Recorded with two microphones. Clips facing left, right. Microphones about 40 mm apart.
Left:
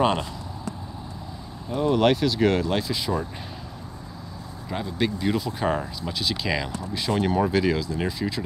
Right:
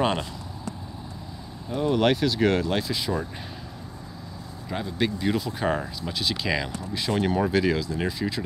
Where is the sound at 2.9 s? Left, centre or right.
Centre.